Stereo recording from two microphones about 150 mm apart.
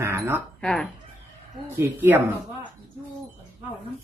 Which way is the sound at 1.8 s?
15° right (ahead or behind).